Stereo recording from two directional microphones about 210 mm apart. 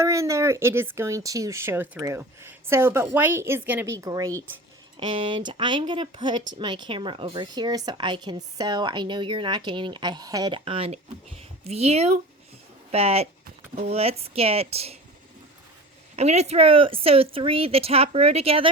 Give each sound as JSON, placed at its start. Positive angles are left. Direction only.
{"t": 0.0, "sound": "speech", "side_deg": -15}
{"t": 16.1, "sound": "speech", "side_deg": -30}